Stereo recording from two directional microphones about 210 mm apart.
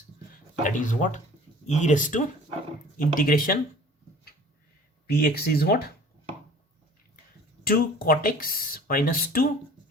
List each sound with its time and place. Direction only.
0.6 s speech: 40° left (ahead or behind)
5.2 s speech: 45° left (ahead or behind)
7.6 s speech: 45° left (ahead or behind)